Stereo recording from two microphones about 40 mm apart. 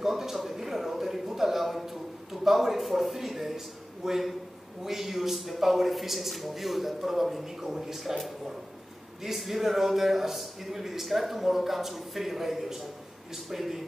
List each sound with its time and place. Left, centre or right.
0.0 s a sound: centre
2.4 s a man's voice: centre
9.2 s a man's voice: centre